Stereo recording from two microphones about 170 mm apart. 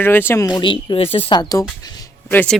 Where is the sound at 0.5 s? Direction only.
30° left (ahead or behind).